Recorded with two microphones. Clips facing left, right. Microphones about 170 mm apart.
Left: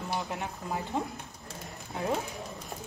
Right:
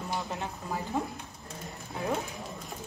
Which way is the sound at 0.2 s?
15° left (ahead or behind).